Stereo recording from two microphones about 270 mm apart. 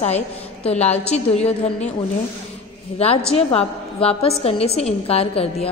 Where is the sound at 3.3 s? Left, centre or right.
Left.